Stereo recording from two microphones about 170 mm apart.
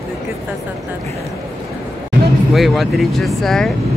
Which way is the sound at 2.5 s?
Centre (ahead or behind).